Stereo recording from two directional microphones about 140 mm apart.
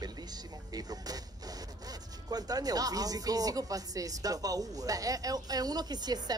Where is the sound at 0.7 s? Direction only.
25° right (ahead or behind).